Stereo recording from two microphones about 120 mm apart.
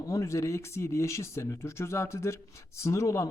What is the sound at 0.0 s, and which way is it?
Speech, 25° left (ahead or behind).